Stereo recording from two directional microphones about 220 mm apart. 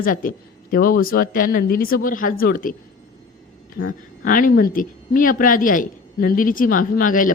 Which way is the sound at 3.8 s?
60° left (ahead or behind).